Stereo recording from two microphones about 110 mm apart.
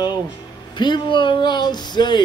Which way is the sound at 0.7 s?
45° left (ahead or behind).